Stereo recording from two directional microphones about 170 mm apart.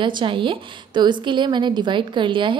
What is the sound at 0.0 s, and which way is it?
A woman's voice, 30° right (ahead or behind).